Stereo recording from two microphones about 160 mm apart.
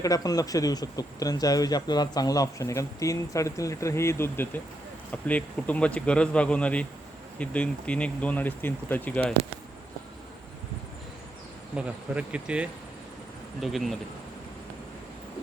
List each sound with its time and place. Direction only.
0.0 s speech: 20° left (ahead or behind)
11.8 s speech: 10° right (ahead or behind)